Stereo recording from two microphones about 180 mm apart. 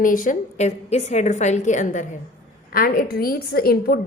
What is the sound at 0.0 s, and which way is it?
A woman's voice, 50° left (ahead or behind).